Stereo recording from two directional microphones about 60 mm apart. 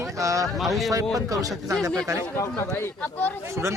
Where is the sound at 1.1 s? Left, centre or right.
Right.